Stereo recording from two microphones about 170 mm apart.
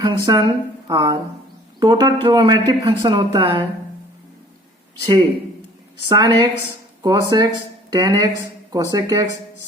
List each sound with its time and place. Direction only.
0.0 s speech: 25° right (ahead or behind)
6.1 s speech: 25° right (ahead or behind)